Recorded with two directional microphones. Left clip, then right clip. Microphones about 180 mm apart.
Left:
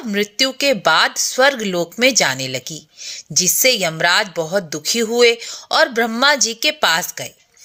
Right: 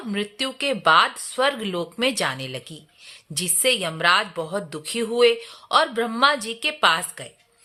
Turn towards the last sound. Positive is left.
turn(degrees=20)  # may be behind; listen again after turning